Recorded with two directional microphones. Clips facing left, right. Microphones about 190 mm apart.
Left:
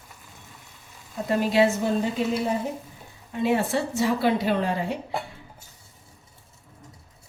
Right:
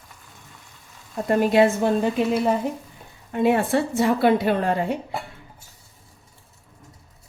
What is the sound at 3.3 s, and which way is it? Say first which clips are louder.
A woman's voice: right 4 dB; 55° right (ahead or behind).